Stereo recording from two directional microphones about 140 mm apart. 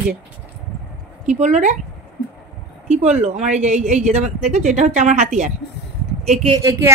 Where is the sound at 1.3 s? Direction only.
60° right (ahead or behind).